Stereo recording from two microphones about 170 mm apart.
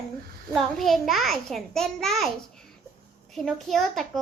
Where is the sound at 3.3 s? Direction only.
Centre (ahead or behind).